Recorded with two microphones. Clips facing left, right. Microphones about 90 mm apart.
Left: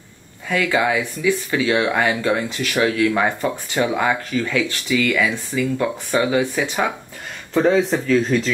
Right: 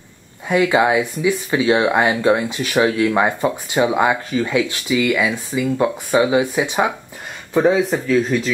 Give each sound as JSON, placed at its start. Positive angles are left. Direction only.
{"t": 0.5, "sound": "speech", "side_deg": -20}